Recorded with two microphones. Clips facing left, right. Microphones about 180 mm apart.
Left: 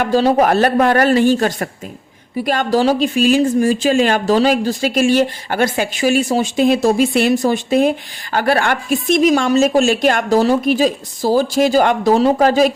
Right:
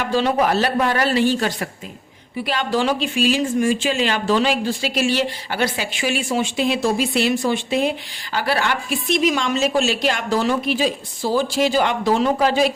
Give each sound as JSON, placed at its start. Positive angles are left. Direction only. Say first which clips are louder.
{"t": 0.0, "sound": "speech", "louder": "left 5 dB", "side_deg": 40}